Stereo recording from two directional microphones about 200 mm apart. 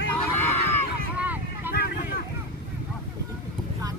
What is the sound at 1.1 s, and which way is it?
Vehicle, 10° right (ahead or behind).